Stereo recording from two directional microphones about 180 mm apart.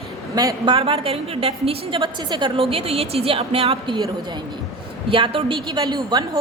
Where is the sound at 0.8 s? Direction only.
30° right (ahead or behind).